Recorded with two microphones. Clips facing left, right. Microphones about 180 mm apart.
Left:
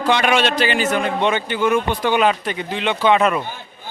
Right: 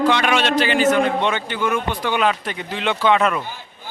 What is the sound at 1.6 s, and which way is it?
Speech, 25° left (ahead or behind).